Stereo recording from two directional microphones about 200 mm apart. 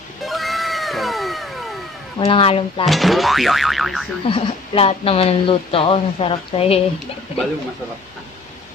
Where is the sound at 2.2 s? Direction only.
30° left (ahead or behind).